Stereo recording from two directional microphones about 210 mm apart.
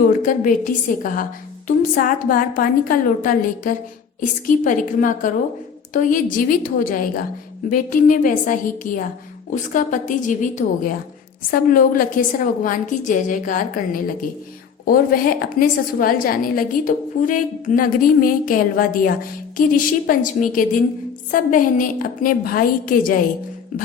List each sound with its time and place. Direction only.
0.1 s a woman's voice: 40° left (ahead or behind)